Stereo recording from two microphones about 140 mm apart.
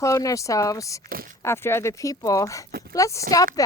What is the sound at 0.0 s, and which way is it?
Speech, 25° left (ahead or behind).